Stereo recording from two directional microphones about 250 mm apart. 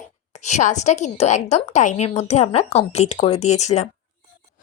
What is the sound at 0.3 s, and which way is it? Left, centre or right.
A woman's voice, left.